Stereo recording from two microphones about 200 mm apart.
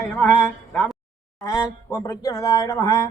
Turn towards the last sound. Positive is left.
turn(degrees=15)  # may be behind; listen again after turning